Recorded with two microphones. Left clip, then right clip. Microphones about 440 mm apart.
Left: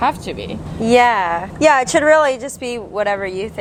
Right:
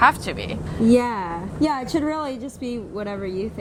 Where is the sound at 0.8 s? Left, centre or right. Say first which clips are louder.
Left 8 dB; left.